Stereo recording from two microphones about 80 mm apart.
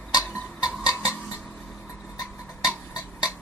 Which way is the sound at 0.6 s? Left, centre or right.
Centre.